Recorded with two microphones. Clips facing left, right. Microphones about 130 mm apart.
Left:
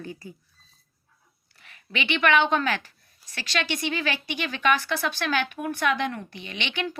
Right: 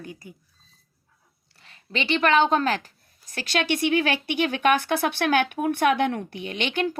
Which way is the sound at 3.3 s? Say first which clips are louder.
Right 4 dB; 50° right (ahead or behind).